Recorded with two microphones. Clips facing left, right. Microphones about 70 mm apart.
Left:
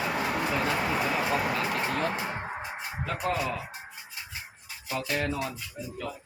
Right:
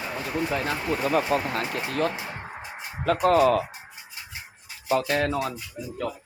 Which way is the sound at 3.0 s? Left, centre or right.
Right.